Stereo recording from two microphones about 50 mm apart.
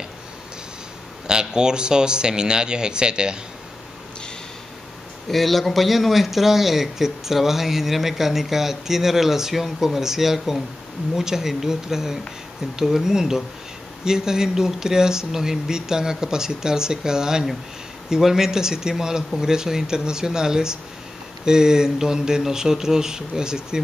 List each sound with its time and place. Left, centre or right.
1.2 s speech: centre
5.3 s speech: centre